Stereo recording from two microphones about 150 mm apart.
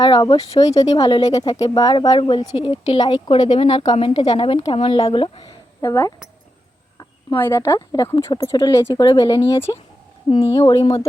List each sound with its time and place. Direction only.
0.0 s speech: 30° left (ahead or behind)
3.9 s a woman's voice: 40° left (ahead or behind)
5.8 s speech: 20° left (ahead or behind)
7.3 s speech: 15° left (ahead or behind)
10.2 s speech: 35° left (ahead or behind)
10.5 s speech: 20° left (ahead or behind)